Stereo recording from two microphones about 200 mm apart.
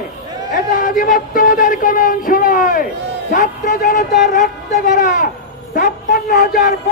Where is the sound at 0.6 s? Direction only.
45° left (ahead or behind).